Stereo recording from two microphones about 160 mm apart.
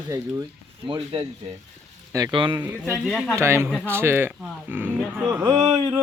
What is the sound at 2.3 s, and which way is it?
Speech, 30° right (ahead or behind).